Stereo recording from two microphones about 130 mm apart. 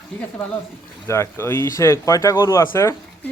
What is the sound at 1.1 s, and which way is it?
Speech, 20° left (ahead or behind).